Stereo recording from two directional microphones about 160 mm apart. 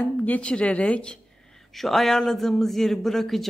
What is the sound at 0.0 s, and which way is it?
A man's voice, 10° left (ahead or behind).